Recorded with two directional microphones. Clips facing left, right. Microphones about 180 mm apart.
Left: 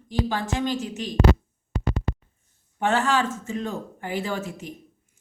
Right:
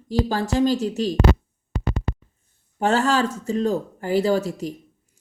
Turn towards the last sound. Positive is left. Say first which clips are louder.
# right 9 dB
turn(degrees=-40)  # may be behind; listen again after turning